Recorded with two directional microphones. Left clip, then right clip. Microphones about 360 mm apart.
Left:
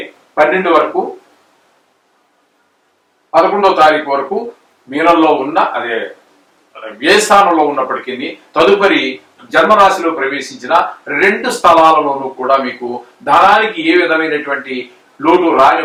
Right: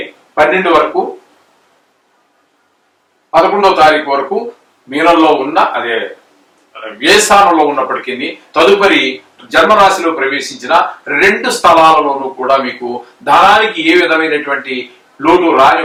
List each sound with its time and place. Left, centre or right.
0.0 s speech: centre
3.3 s a man's voice: centre
3.6 s speech: centre
3.9 s a man's voice: centre